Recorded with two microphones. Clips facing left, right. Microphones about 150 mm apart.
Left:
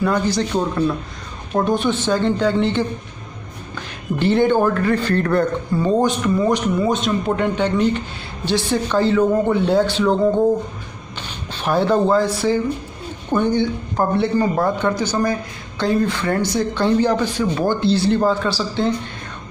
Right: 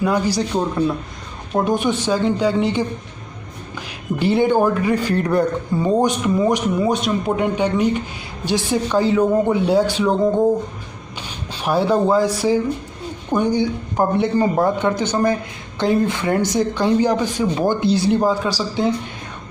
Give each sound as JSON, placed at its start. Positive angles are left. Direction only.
{"t": 0.0, "sound": "a man's voice", "side_deg": -10}
{"t": 11.1, "sound": "a sound", "side_deg": -5}
{"t": 13.3, "sound": "a man's voice", "side_deg": -10}